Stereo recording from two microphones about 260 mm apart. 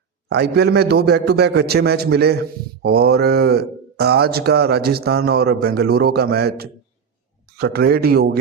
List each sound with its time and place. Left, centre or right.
0.3 s a man's voice: right